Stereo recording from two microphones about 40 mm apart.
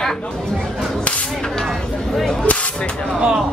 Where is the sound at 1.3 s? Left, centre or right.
Centre.